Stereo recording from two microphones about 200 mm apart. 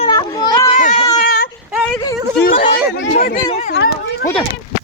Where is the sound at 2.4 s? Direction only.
45° left (ahead or behind).